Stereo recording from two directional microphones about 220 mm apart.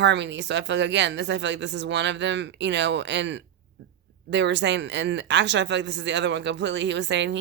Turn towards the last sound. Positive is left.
turn(degrees=-55)  # may be behind; listen again after turning